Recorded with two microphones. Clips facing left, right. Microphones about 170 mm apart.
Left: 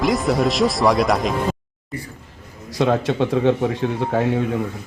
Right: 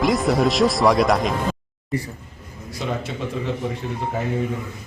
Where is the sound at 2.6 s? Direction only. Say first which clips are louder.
Left 9 dB; 85° left.